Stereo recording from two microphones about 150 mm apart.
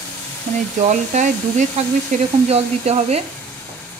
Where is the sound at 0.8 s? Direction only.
55° right (ahead or behind).